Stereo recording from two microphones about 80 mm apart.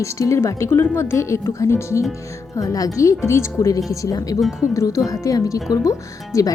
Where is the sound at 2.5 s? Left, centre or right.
Left.